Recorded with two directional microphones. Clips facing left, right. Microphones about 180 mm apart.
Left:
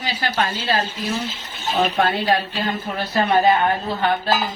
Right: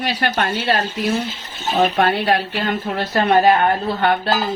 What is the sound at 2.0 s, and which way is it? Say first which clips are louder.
Speech: right 2 dB; 70° right (ahead or behind).